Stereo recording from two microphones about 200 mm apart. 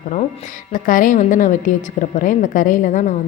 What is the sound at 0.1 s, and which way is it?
A woman's voice, 35° left (ahead or behind).